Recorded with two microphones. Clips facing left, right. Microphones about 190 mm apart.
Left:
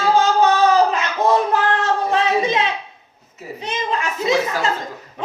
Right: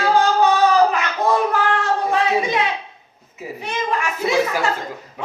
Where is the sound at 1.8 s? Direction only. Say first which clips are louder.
Left 1 dB; 20° left (ahead or behind).